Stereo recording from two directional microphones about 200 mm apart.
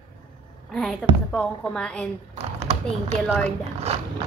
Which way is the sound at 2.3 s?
30° right (ahead or behind).